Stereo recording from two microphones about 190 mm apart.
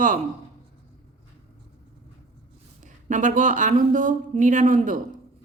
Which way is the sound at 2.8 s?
40° right (ahead or behind).